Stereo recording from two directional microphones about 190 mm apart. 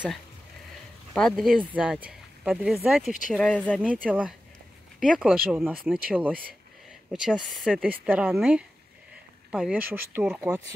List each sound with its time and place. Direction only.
1.1 s speech: centre (ahead or behind)
3.8 s speech: 5° right (ahead or behind)
5.1 s speech: 5° right (ahead or behind)